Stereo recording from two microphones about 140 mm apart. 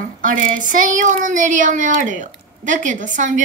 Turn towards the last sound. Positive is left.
turn(degrees=-65)  # may be behind; listen again after turning